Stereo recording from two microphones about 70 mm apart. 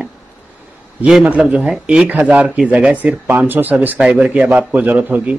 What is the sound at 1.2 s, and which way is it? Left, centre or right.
A man's voice, centre.